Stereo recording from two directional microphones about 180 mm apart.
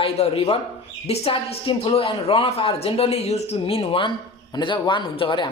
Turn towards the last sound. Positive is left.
turn(degrees=25)  # may be behind; listen again after turning